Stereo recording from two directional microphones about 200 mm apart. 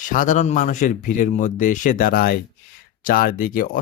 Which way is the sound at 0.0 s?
40° left (ahead or behind).